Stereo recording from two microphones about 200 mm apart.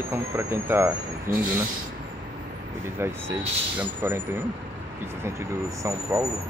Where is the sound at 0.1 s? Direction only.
10° right (ahead or behind).